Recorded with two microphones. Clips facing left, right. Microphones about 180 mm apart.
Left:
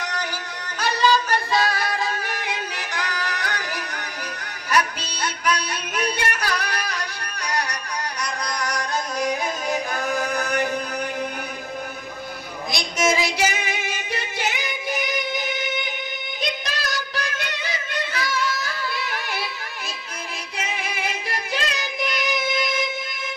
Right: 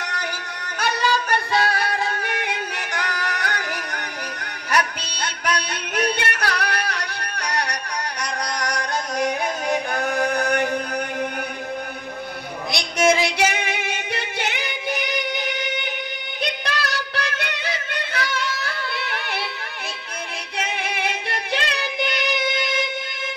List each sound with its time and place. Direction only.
0.7 s music: 60° right (ahead or behind)
12.7 s female singing: 60° right (ahead or behind)
16.6 s music: 65° right (ahead or behind)
20.5 s music: 65° right (ahead or behind)